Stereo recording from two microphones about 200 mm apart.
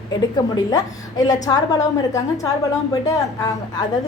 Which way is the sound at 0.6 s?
20° left (ahead or behind).